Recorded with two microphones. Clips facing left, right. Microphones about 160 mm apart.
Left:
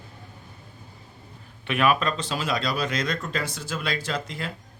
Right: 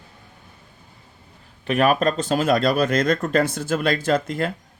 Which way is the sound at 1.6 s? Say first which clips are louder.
Right 4 dB; 40° right (ahead or behind).